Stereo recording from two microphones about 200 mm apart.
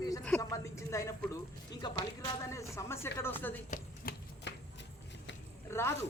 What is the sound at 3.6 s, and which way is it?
Chopping, 40° left (ahead or behind).